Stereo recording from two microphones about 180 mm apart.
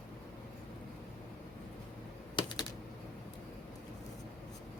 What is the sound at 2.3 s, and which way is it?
Typing, 25° left (ahead or behind).